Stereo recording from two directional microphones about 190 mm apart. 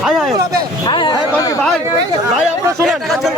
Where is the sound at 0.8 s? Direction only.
25° left (ahead or behind).